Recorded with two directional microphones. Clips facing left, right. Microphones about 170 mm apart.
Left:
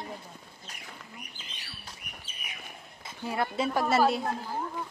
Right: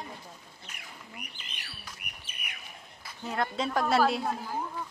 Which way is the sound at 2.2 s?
65° right (ahead or behind).